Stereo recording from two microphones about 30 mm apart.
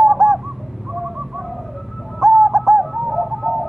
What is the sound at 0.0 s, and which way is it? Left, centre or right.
Bird, centre.